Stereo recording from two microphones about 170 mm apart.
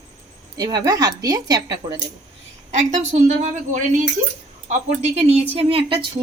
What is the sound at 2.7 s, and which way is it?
A woman's voice, 45° right (ahead or behind).